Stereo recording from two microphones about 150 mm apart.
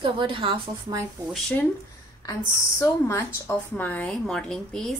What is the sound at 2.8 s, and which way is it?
A woman's voice, 20° left (ahead or behind).